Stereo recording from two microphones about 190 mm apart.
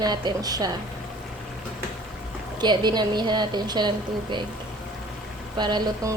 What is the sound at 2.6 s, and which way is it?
A woman's voice, 20° right (ahead or behind).